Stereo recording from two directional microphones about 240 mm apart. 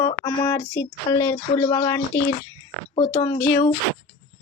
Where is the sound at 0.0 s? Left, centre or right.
Left.